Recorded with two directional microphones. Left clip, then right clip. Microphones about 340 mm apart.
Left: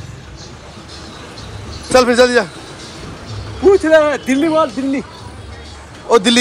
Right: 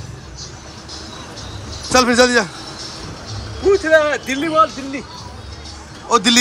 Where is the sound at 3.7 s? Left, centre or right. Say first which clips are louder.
Left 2 dB; centre.